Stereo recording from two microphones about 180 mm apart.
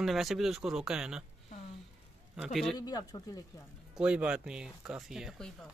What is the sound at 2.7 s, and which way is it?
Speech, 20° left (ahead or behind).